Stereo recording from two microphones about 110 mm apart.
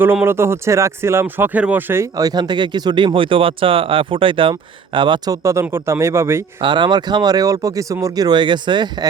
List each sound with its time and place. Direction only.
0.0 s speech: 20° right (ahead or behind)
2.1 s speech: 35° right (ahead or behind)
5.3 s speech: 30° right (ahead or behind)
6.6 s speech: 45° right (ahead or behind)